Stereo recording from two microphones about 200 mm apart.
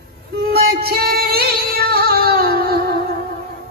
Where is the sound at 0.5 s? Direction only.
50° right (ahead or behind).